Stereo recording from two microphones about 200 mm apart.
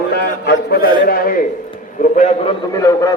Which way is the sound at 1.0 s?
45° left (ahead or behind).